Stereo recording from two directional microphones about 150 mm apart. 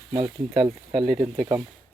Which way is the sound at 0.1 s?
35° right (ahead or behind).